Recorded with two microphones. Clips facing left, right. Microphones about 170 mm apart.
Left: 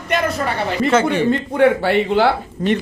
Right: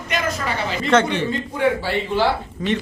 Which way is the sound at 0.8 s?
5° left (ahead or behind).